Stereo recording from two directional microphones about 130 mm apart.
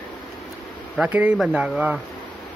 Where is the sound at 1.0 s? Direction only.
10° right (ahead or behind).